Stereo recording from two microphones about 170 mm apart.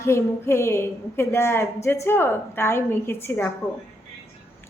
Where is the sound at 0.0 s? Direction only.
15° left (ahead or behind).